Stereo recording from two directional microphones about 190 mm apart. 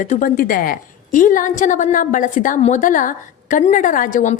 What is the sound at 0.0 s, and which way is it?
A woman's voice, 45° left (ahead or behind).